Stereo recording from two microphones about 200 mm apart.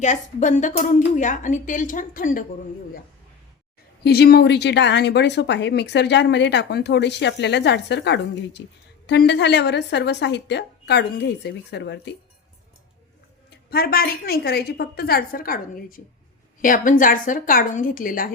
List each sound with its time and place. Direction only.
0.0 s speech: 40° left (ahead or behind)
4.0 s speech: 55° left (ahead or behind)
13.5 s a woman's voice: 50° left (ahead or behind)